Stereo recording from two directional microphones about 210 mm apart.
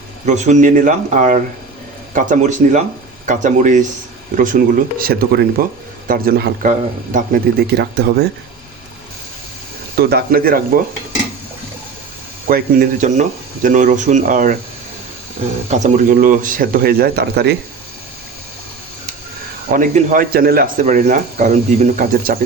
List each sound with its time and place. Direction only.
0.3 s speech: 35° right (ahead or behind); by 8.1 s 50° right (ahead or behind)
9.9 s speech: 50° right (ahead or behind)
12.5 s speech: 45° right (ahead or behind)
15.7 s speech: 35° right (ahead or behind); by 17.6 s 50° right (ahead or behind)
19.7 s speech: 40° right (ahead or behind)